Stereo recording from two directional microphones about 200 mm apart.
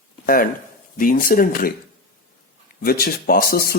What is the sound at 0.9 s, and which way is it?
Speech, 45° left (ahead or behind).